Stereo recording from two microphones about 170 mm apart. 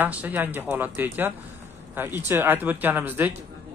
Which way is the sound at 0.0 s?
10° right (ahead or behind).